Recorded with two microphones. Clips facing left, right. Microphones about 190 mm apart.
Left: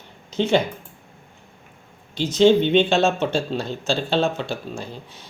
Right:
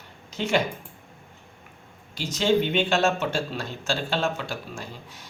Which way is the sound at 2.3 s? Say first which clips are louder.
Left 7 dB; 25° left (ahead or behind).